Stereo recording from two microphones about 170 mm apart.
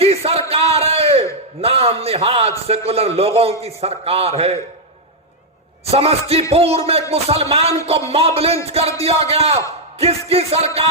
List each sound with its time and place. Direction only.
0.0 s music: 35° right (ahead or behind)
0.5 s a sound: 35° right (ahead or behind)
1.6 s a man's voice: 35° right (ahead or behind)
5.8 s speech: 35° right (ahead or behind)